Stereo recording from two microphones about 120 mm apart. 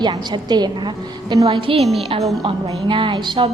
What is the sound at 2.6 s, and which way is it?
Speech, 45° right (ahead or behind).